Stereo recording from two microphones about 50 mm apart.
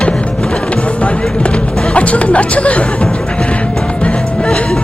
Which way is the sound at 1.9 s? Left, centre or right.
Left.